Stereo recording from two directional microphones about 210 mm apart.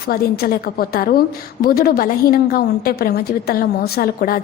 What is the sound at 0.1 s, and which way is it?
A woman's voice, 45° left (ahead or behind).